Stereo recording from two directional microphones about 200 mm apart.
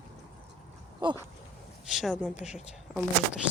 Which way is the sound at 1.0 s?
25° right (ahead or behind).